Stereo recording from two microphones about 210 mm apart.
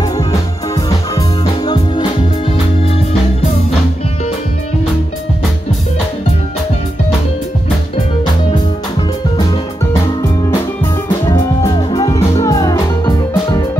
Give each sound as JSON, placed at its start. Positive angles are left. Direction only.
{"t": 1.1, "sound": "music", "side_deg": 15}
{"t": 11.2, "sound": "music", "side_deg": 20}